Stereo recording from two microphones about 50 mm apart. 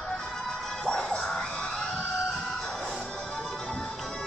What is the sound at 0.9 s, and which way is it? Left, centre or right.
Music, centre.